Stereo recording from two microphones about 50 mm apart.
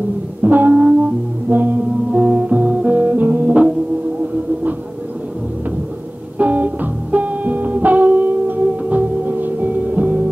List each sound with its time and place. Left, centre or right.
0.4 s music: right
6.3 s music: right